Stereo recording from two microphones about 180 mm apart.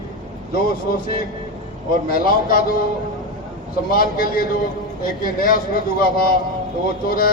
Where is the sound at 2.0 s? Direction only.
55° left (ahead or behind).